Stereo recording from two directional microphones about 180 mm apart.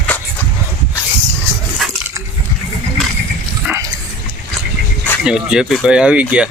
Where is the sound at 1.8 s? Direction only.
5° right (ahead or behind).